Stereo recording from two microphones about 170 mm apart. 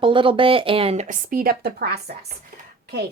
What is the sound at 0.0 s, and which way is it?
Speech, 30° right (ahead or behind).